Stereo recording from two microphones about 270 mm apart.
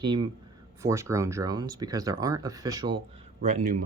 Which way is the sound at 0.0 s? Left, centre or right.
Centre.